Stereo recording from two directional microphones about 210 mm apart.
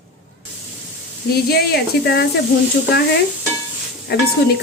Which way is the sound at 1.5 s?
50° left (ahead or behind).